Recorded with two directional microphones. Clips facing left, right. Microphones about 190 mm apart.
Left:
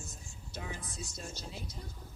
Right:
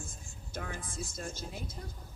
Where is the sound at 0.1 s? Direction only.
50° right (ahead or behind).